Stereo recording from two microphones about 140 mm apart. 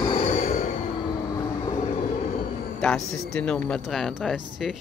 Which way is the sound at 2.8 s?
5° left (ahead or behind).